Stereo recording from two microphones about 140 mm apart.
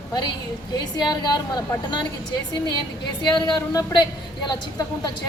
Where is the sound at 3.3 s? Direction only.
30° left (ahead or behind).